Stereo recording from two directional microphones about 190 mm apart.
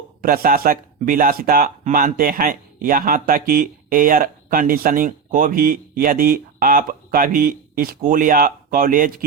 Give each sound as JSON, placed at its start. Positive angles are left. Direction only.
{"t": 0.2, "sound": "speech", "side_deg": -50}